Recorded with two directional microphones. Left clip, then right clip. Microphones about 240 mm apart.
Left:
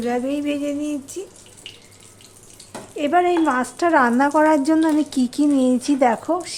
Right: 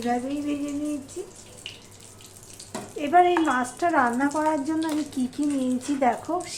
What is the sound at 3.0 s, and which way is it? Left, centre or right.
A woman's voice, left.